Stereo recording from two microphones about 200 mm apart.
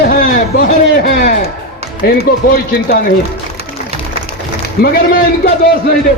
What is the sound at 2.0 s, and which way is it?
Speech, 50° left (ahead or behind).